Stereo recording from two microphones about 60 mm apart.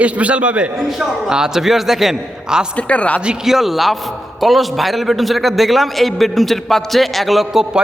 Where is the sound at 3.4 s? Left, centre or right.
Centre.